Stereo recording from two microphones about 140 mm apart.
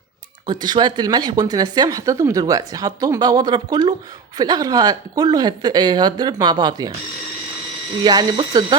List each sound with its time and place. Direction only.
0.4 s speech: 30° right (ahead or behind)
8.0 s speech: 30° right (ahead or behind)